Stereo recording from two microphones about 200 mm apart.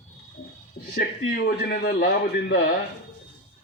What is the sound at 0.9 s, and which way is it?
A man's voice, 55° left (ahead or behind).